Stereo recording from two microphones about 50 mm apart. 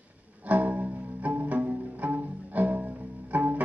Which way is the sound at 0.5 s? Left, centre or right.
Right.